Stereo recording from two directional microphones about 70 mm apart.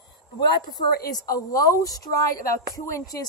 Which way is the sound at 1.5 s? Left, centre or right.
Left.